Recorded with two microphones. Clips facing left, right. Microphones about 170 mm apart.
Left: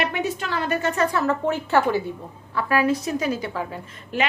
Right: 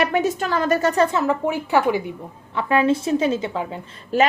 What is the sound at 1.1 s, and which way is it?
Speech, 15° right (ahead or behind).